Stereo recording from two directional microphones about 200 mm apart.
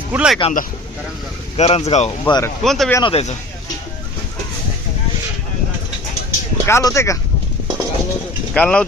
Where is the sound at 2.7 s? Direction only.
Centre (ahead or behind).